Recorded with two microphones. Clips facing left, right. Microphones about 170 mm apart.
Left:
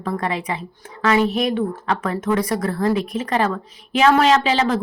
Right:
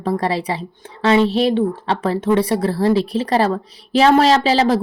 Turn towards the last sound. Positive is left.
turn(degrees=-35)  # may be behind; listen again after turning